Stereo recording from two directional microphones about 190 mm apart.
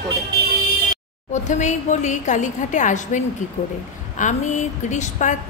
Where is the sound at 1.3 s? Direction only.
40° left (ahead or behind).